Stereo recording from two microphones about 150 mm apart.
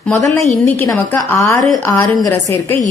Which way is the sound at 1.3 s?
20° left (ahead or behind).